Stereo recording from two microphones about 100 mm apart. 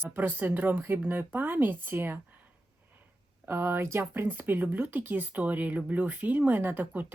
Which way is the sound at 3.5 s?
25° right (ahead or behind).